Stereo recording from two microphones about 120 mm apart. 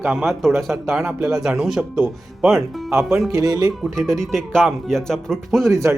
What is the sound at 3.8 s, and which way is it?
Speech, 5° left (ahead or behind).